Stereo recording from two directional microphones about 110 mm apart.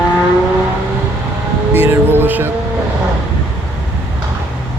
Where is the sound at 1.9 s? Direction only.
20° right (ahead or behind).